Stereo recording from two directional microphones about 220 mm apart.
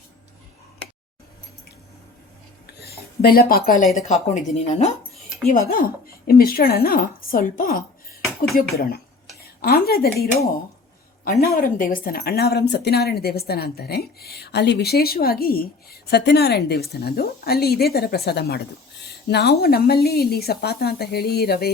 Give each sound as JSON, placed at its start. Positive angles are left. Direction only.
{"t": 2.8, "sound": "speech", "side_deg": 45}
{"t": 4.1, "sound": "speech", "side_deg": 30}
{"t": 5.1, "sound": "dog", "side_deg": 0}
{"t": 5.5, "sound": "speech", "side_deg": 40}
{"t": 11.3, "sound": "speech", "side_deg": 40}